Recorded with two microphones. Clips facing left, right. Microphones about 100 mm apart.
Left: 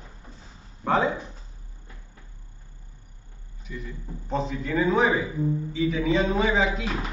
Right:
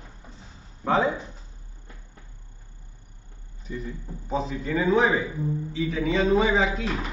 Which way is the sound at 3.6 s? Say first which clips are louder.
Right 4 dB; 35° right (ahead or behind).